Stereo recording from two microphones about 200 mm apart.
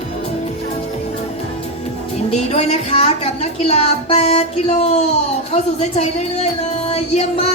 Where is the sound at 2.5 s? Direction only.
30° left (ahead or behind).